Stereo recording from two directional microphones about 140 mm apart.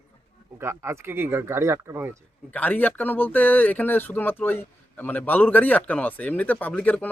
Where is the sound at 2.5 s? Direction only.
10° left (ahead or behind).